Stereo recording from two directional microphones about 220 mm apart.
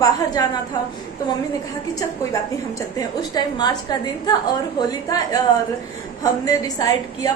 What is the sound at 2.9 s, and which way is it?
A woman's voice, 20° left (ahead or behind).